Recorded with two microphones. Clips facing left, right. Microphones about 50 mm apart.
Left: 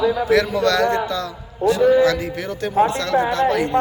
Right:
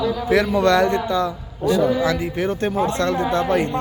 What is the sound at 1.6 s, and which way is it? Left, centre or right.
Speech, left.